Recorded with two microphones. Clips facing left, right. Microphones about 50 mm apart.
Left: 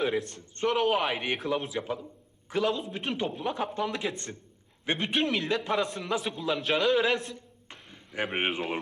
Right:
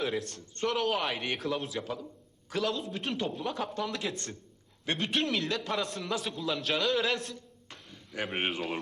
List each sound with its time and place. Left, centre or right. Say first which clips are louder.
0.0 s a man's voice: left 4 dB; centre
0.3 s a man's voice: left 4 dB; left
7.3 s a sound: left 1 dB; left
8.4 s a man's voice: left 2 dB; centre